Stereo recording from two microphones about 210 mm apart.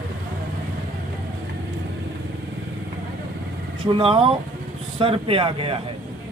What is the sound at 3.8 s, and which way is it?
Speech, 25° right (ahead or behind).